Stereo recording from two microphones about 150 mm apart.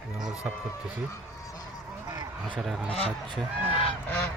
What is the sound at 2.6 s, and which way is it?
Speech, 5° right (ahead or behind).